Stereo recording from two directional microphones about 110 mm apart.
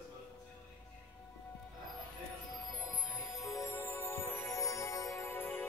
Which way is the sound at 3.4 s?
30° left (ahead or behind).